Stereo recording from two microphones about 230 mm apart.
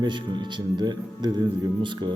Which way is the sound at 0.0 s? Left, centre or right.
Centre.